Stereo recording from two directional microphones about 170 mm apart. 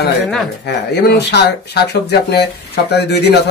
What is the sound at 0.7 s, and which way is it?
Speech, 75° left (ahead or behind).